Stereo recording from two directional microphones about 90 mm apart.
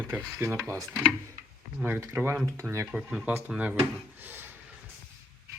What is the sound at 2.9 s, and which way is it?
Speech, 10° right (ahead or behind).